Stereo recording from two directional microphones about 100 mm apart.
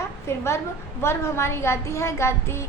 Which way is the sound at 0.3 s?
25° left (ahead or behind).